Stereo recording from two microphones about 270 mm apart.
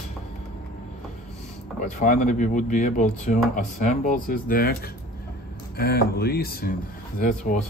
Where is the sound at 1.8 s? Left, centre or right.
Left.